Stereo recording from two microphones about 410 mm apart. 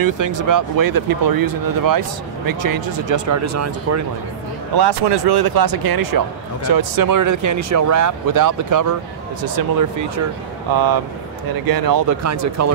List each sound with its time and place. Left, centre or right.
0.0 s speech: right
4.7 s speech: right
10.7 s speech: right